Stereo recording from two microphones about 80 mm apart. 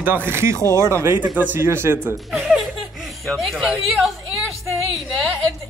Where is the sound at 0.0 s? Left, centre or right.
Right.